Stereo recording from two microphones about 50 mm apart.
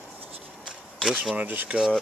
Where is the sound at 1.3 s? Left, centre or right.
Right.